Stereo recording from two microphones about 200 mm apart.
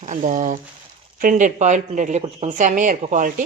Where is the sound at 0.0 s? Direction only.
40° right (ahead or behind).